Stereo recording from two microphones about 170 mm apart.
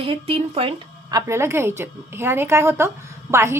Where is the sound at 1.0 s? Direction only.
20° right (ahead or behind).